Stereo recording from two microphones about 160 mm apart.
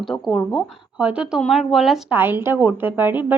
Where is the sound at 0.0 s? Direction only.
Centre (ahead or behind).